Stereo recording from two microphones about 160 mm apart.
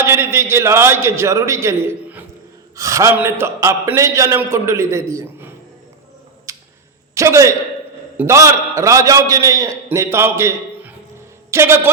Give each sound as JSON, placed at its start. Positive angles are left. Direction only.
{"t": 0.0, "sound": "a man's voice", "side_deg": -15}
{"t": 6.5, "sound": "a sound", "side_deg": -20}
{"t": 7.1, "sound": "a man's voice", "side_deg": -20}